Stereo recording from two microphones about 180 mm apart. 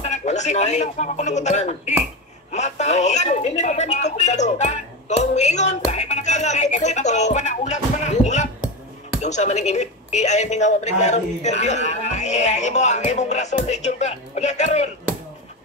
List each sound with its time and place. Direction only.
0.0 s speech: 40° left (ahead or behind)